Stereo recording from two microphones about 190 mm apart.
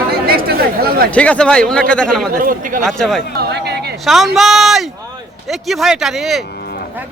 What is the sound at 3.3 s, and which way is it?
Speech, 60° right (ahead or behind).